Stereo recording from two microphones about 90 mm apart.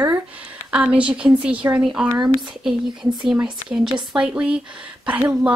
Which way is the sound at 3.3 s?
10° right (ahead or behind).